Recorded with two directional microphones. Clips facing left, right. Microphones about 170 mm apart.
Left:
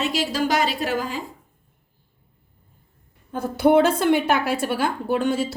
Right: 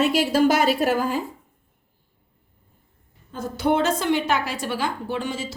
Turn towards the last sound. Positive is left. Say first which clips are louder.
# left 6 dB
turn(degrees=60)  # may be behind; listen again after turning